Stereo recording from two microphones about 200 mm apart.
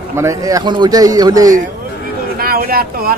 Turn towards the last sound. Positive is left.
turn(degrees=-50)  # may be behind; listen again after turning